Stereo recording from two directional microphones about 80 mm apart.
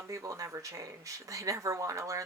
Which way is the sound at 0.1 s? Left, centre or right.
Right.